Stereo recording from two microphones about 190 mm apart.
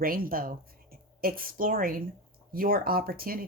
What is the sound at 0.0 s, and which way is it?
Speech, 50° right (ahead or behind).